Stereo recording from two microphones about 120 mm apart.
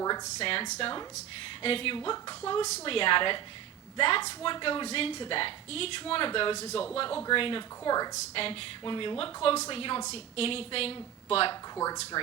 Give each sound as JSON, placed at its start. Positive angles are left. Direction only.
{"t": 0.3, "sound": "speech", "side_deg": 55}
{"t": 2.0, "sound": "speech", "side_deg": 35}
{"t": 2.8, "sound": "speech", "side_deg": 50}
{"t": 7.9, "sound": "speech", "side_deg": 35}
{"t": 8.1, "sound": "speech", "side_deg": 50}
{"t": 12.1, "sound": "speech", "side_deg": 30}